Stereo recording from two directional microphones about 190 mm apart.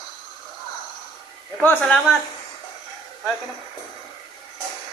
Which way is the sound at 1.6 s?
10° left (ahead or behind).